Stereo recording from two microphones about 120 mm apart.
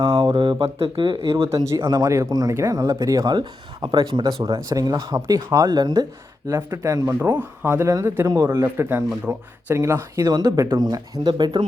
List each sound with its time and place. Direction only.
0.0 s mantra: 50° right (ahead or behind)
0.3 s speech: 45° right (ahead or behind)
1.5 s speech: 25° right (ahead or behind); by 4.6 s 45° right (ahead or behind)
4.7 s speech: 30° right (ahead or behind)
6.6 s a man's voice: 20° right (ahead or behind); by 11.6 s 40° right (ahead or behind)